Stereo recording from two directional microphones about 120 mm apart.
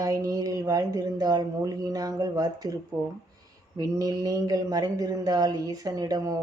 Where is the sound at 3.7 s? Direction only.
30° right (ahead or behind).